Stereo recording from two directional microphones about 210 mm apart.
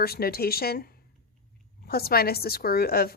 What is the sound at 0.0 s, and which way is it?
Speech, 45° left (ahead or behind).